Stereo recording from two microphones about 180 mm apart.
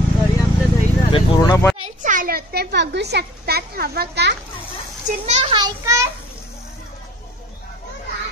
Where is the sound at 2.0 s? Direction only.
45° right (ahead or behind); by 4.4 s 70° right (ahead or behind).